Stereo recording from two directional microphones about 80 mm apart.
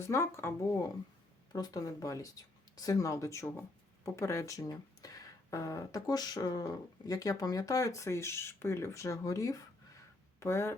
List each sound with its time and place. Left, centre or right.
0.0 s speech: left
1.5 s speech: left
10.4 s speech: left